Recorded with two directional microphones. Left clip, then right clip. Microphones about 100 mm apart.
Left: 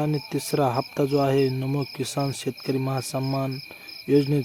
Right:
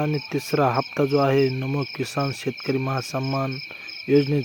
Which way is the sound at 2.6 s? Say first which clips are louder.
Right 2 dB; 10° left (ahead or behind).